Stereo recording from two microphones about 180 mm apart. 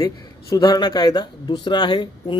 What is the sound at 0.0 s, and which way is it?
Speech, 25° left (ahead or behind).